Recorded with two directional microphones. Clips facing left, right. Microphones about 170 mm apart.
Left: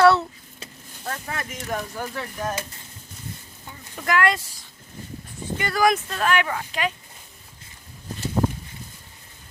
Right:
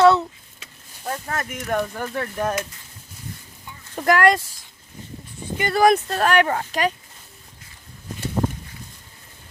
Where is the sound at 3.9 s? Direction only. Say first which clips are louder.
Right 5 dB; 45° right (ahead or behind).